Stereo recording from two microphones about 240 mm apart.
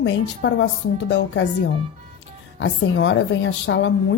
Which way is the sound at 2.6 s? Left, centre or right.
Left.